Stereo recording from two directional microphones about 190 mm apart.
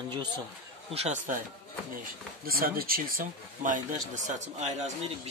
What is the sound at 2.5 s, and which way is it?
Speech, 50° right (ahead or behind).